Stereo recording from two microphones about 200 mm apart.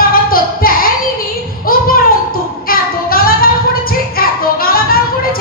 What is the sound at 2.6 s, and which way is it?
Child singing, 45° left (ahead or behind).